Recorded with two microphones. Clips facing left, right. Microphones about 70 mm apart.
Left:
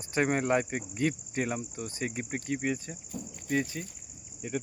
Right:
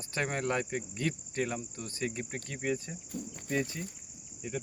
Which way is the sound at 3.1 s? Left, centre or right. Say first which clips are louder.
Left 1 dB; left.